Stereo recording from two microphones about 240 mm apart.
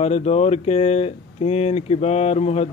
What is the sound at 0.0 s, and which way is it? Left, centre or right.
Speech, left.